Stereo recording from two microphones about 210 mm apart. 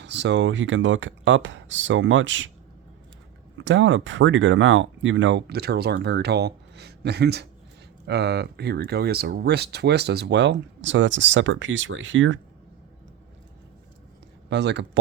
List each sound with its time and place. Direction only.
0.0 s speech: 55° right (ahead or behind)
3.6 s speech: 65° right (ahead or behind)
14.5 s speech: 55° right (ahead or behind)